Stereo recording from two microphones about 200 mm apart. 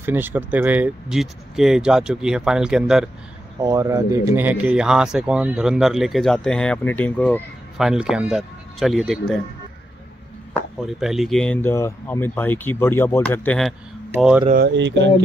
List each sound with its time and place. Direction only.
0.0 s speech: 10° right (ahead or behind)
3.6 s speech: 15° right (ahead or behind); by 9.4 s centre (ahead or behind)
10.5 s speech: centre (ahead or behind)
14.5 s speech: 55° right (ahead or behind)